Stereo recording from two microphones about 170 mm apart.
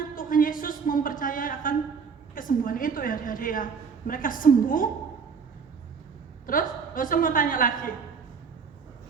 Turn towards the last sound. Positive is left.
turn(degrees=55)  # may be behind; listen again after turning